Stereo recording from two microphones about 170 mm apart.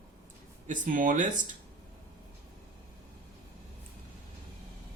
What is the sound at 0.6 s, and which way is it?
Speech, 50° right (ahead or behind).